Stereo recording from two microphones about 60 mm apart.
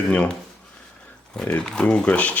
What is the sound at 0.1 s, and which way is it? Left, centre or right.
Speech, centre.